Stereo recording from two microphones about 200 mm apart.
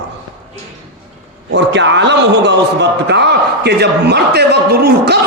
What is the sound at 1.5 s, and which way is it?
A man's voice, 65° right (ahead or behind).